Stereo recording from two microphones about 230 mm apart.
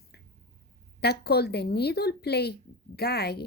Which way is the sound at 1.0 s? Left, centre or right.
Left.